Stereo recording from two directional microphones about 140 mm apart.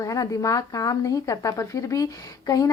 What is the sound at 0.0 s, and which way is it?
A woman's voice, 25° left (ahead or behind).